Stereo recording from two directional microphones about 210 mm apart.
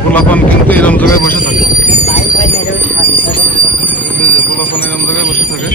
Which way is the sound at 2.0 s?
30° left (ahead or behind).